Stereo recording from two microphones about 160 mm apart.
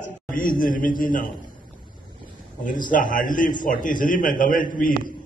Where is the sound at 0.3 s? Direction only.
60° left (ahead or behind).